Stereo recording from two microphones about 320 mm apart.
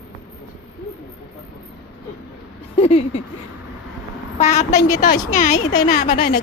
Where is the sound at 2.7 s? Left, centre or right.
Centre.